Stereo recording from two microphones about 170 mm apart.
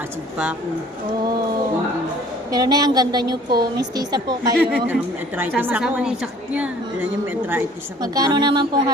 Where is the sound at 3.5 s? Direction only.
65° right (ahead or behind).